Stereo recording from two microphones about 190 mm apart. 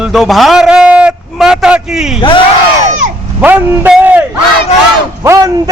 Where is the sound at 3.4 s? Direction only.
10° right (ahead or behind).